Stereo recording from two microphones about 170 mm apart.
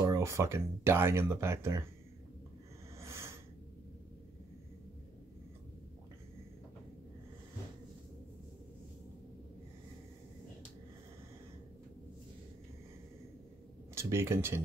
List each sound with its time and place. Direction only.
0.0 s speech: 20° right (ahead or behind)
3.0 s a sound: 15° right (ahead or behind)
13.9 s speech: 15° right (ahead or behind)